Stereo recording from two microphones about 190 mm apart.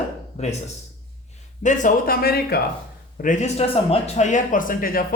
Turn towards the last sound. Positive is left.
turn(degrees=50)  # may be behind; listen again after turning